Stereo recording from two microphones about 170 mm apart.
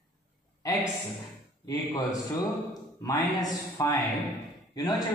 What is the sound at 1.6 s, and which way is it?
Speech, 20° left (ahead or behind).